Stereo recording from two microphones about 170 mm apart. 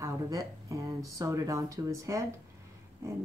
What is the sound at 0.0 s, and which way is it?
Speech, 20° right (ahead or behind).